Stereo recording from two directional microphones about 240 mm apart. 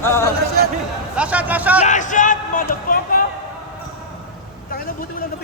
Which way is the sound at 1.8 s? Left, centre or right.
Left.